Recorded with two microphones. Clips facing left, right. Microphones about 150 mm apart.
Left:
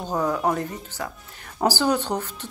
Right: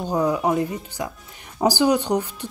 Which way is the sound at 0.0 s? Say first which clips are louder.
Right 2 dB; 10° right (ahead or behind).